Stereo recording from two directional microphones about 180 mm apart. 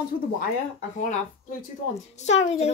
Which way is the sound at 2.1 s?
40° left (ahead or behind).